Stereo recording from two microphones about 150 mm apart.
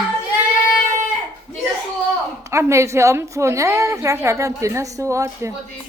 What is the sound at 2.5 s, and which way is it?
A woman's voice, 20° right (ahead or behind).